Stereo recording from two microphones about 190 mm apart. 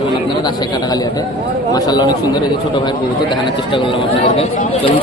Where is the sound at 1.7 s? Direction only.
20° left (ahead or behind).